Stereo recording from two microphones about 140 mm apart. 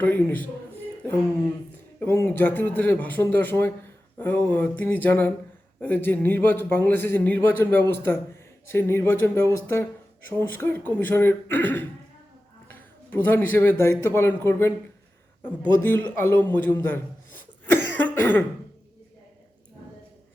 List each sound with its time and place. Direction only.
0.0 s a man's voice: 10° left (ahead or behind)
2.0 s a man's voice: 15° left (ahead or behind)
13.1 s a man's voice: 15° left (ahead or behind)
15.8 s a man's voice: 15° left (ahead or behind)
16.6 s cough: 15° left (ahead or behind)